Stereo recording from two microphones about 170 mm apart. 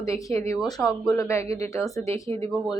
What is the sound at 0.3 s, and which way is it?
A woman's voice, 15° left (ahead or behind).